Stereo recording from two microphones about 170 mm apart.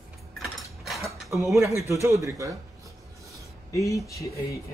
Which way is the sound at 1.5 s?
15° right (ahead or behind).